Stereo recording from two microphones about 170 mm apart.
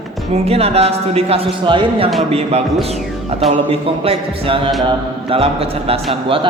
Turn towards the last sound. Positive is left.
turn(degrees=-30)  # may be behind; listen again after turning